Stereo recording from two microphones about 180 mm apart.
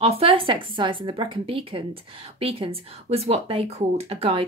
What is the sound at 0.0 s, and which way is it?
Speech, 30° right (ahead or behind).